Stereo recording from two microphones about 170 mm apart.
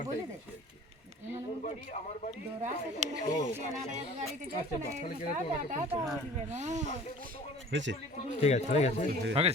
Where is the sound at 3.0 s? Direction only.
45° right (ahead or behind).